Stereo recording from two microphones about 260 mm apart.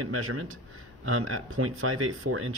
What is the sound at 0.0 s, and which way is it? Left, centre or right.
Speech, right.